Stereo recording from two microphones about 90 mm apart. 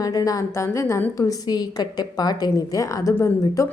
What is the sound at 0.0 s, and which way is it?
A woman's voice, 45° left (ahead or behind).